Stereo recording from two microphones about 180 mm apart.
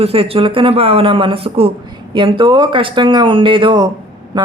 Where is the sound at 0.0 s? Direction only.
35° right (ahead or behind).